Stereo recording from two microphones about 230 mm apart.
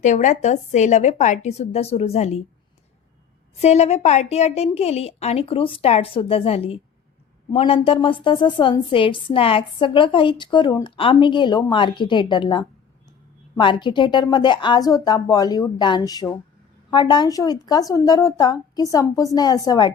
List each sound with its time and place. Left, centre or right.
0.0 s a woman's voice: left
3.6 s a woman's voice: left